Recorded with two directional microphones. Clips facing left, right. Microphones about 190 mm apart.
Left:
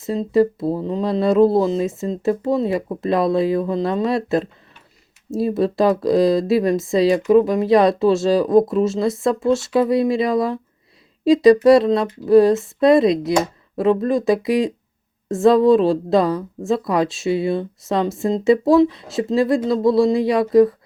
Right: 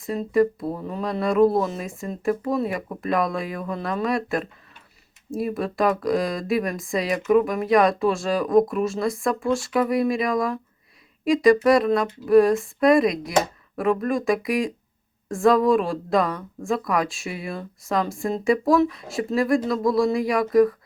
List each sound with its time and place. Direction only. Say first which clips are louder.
0.0 s speech: left 4 dB; 25° left (ahead or behind)